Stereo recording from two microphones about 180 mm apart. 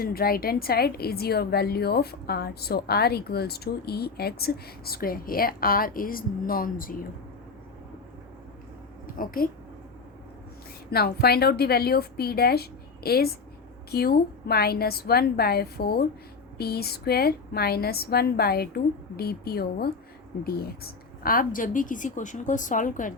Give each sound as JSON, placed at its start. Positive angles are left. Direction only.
{"t": 0.0, "sound": "a woman's voice", "side_deg": 55}
{"t": 9.1, "sound": "a woman's voice", "side_deg": 50}
{"t": 10.9, "sound": "a woman's voice", "side_deg": 60}